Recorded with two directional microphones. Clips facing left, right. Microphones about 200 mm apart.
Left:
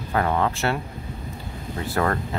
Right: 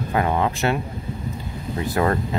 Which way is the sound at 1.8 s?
15° right (ahead or behind).